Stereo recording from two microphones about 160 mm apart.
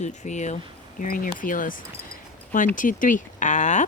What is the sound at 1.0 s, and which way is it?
Speech, 60° left (ahead or behind).